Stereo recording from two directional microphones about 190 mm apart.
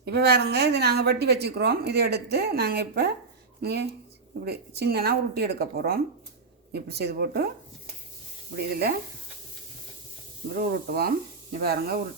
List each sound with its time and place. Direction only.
0.0 s a woman's voice: 60° right (ahead or behind)
8.5 s sizzle: 55° right (ahead or behind)
10.6 s a woman's voice: 55° right (ahead or behind)